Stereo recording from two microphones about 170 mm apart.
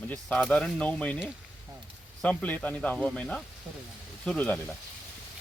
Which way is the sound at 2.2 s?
10° left (ahead or behind).